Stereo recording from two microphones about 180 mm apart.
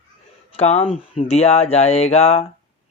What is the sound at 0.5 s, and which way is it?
Speech, 35° left (ahead or behind).